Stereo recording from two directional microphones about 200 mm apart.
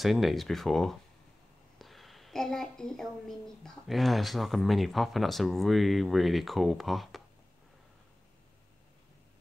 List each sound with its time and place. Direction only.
0.0 s a woman's voice: centre (ahead or behind)